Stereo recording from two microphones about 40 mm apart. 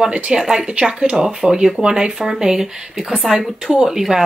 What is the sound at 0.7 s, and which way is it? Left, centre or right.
Speech, right.